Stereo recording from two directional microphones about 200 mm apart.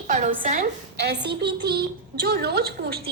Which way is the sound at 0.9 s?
55° right (ahead or behind).